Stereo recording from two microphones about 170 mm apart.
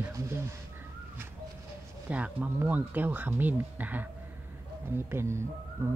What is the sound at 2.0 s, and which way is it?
Speech, 10° right (ahead or behind).